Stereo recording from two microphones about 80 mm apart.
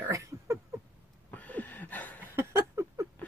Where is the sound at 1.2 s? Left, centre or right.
Left.